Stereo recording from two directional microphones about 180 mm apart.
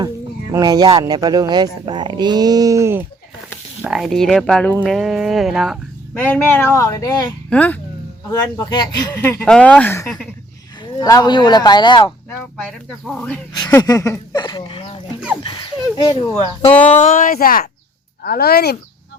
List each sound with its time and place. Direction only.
0.5 s speech: 20° right (ahead or behind)
3.8 s speech: centre (ahead or behind)
6.1 s speech: 10° left (ahead or behind)
7.5 s speech: 10° left (ahead or behind)
8.3 s speech: 20° left (ahead or behind)
12.5 s speech: centre (ahead or behind)
13.6 s speech: 15° left (ahead or behind)
15.4 s a sound: 25° left (ahead or behind)
17.0 s speech: 45° left (ahead or behind); by 18.8 s 60° left (ahead or behind)